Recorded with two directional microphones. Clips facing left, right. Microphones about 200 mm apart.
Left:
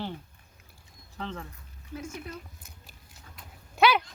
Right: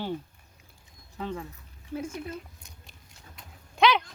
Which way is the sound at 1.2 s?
10° right (ahead or behind).